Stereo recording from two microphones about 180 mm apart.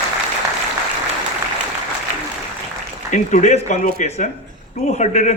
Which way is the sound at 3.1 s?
40° left (ahead or behind).